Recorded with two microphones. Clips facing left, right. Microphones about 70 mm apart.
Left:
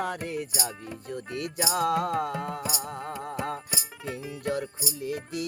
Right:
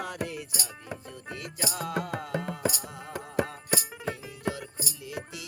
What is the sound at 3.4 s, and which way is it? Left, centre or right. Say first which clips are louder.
Music: right 4 dB; right.